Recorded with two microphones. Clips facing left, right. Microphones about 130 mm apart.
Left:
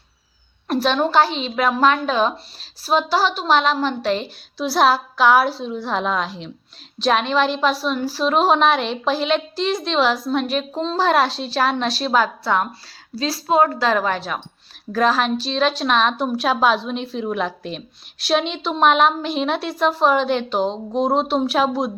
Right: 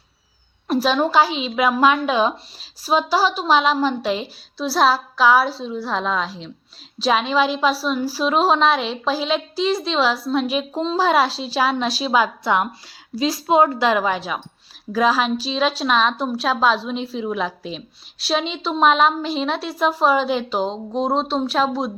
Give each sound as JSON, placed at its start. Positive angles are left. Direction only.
{"t": 0.7, "sound": "a woman's voice", "side_deg": -5}